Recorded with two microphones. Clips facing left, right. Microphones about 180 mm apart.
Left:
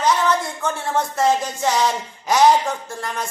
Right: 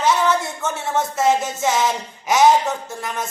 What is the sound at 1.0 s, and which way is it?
Music, 25° right (ahead or behind).